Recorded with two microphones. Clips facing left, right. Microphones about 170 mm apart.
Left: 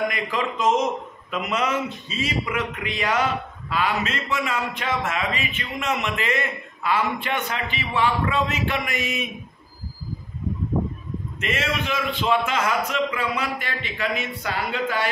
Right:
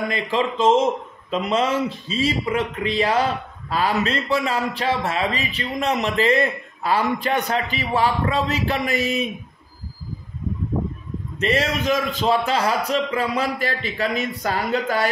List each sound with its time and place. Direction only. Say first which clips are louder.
0.1 s a man's voice: right 4 dB; 30° right (ahead or behind)
11.3 s a man's voice: right 5 dB; 35° right (ahead or behind)